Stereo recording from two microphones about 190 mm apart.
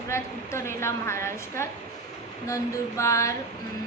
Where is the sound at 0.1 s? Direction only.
15° left (ahead or behind).